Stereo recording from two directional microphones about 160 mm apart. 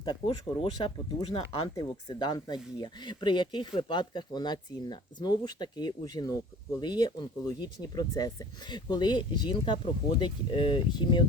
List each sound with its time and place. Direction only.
0.0 s speech: 30° left (ahead or behind)